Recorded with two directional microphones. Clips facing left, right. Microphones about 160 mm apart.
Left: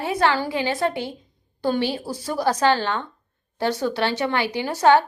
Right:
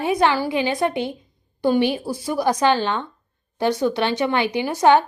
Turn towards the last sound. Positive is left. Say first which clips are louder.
# right 1 dB
turn(degrees=-15)  # may be behind; listen again after turning